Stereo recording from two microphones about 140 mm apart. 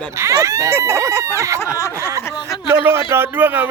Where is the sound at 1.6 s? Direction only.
20° left (ahead or behind).